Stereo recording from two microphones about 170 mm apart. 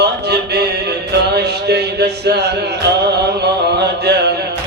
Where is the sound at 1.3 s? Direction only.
75° right (ahead or behind).